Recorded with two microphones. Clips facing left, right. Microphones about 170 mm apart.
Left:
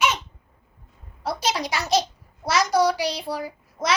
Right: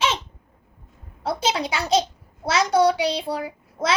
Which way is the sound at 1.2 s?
25° right (ahead or behind).